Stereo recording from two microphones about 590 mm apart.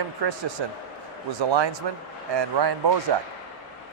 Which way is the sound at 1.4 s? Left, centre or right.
Right.